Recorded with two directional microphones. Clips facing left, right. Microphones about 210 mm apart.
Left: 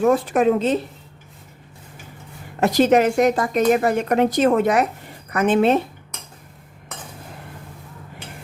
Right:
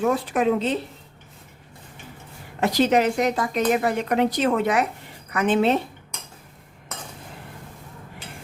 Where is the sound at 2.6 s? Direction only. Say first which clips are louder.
Left 4 dB; 50° left (ahead or behind).